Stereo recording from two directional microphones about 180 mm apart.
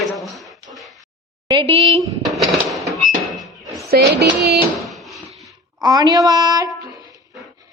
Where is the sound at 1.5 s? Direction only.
30° right (ahead or behind).